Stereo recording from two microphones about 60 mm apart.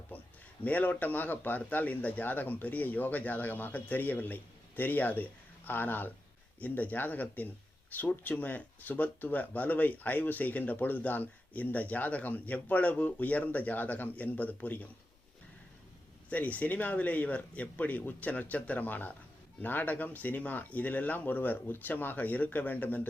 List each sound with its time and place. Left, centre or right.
0.1 s a sound: left
0.6 s speech: left
16.3 s speech: left